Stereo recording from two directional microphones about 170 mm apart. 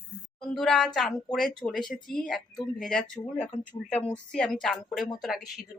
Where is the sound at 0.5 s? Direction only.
Centre (ahead or behind).